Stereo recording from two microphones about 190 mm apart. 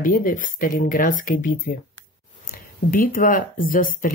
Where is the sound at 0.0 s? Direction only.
45° left (ahead or behind).